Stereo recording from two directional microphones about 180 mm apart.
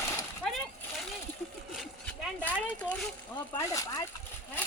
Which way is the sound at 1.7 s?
5° left (ahead or behind).